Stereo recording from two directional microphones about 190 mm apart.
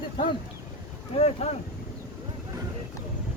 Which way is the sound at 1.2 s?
35° left (ahead or behind).